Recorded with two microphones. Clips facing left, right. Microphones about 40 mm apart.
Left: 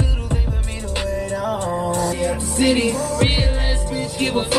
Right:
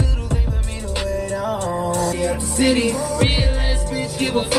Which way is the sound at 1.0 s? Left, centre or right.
Left.